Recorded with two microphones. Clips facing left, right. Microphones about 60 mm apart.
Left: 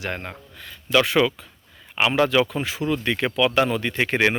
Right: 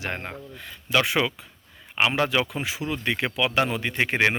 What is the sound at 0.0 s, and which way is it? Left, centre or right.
Speech, centre.